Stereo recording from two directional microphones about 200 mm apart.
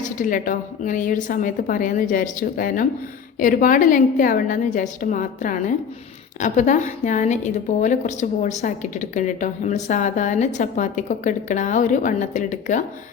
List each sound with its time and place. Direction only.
0.0 s a woman's voice: 40° left (ahead or behind)